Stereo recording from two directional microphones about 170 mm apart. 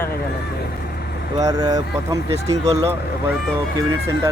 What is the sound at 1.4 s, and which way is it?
Speech, 20° right (ahead or behind).